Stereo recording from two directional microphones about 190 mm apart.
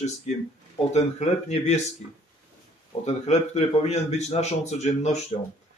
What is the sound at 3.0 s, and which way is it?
Speech, 35° left (ahead or behind).